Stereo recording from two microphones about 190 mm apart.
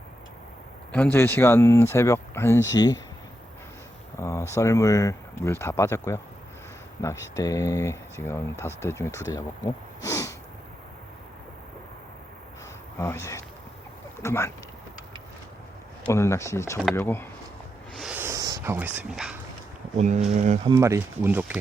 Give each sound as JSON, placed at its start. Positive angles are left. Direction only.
{"t": 0.9, "sound": "speech", "side_deg": 10}
{"t": 4.2, "sound": "a sound", "side_deg": 15}
{"t": 4.5, "sound": "speech", "side_deg": 15}
{"t": 10.0, "sound": "sniff", "side_deg": 15}
{"t": 13.0, "sound": "speech", "side_deg": 15}
{"t": 16.0, "sound": "speech", "side_deg": 15}
{"t": 17.9, "sound": "a sound", "side_deg": -5}
{"t": 20.0, "sound": "speech", "side_deg": -35}
{"t": 20.7, "sound": "speech", "side_deg": -15}